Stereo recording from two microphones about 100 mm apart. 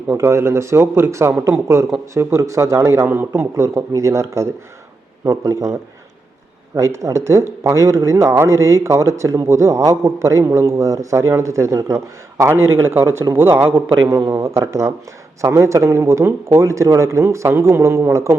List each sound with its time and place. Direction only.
0.1 s a man's voice: 30° right (ahead or behind)
6.7 s speech: 30° right (ahead or behind)